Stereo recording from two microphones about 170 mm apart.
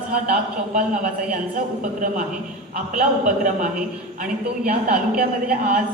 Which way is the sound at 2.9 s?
50° right (ahead or behind).